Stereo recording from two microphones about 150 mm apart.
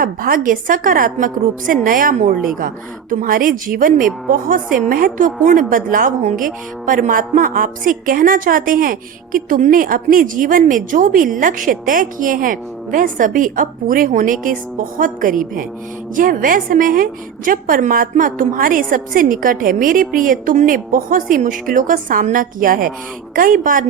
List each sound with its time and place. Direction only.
0.0 s a woman's voice: 70° right (ahead or behind)